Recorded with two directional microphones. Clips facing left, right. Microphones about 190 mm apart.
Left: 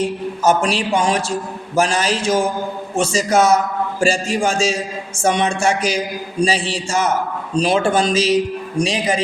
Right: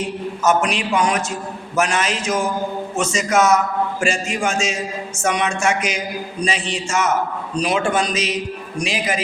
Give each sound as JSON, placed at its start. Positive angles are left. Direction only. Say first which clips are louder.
{"t": 0.4, "sound": "a man's voice", "louder": "left 2 dB", "side_deg": 30}